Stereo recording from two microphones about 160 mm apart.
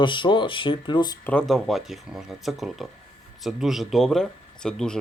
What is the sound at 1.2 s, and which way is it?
Speech, 5° left (ahead or behind).